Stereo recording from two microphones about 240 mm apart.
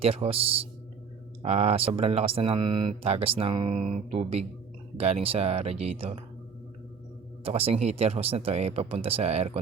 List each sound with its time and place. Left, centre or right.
0.0 s speech: right
7.4 s speech: right